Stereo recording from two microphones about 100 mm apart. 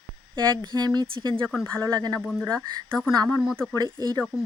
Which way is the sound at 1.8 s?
40° right (ahead or behind).